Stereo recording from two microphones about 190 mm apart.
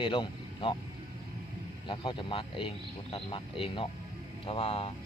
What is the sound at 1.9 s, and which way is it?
Speech, 25° left (ahead or behind).